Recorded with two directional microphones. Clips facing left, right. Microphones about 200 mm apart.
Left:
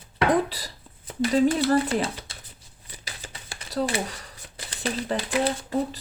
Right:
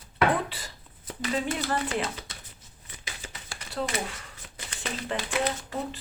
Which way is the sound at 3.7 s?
35° left (ahead or behind).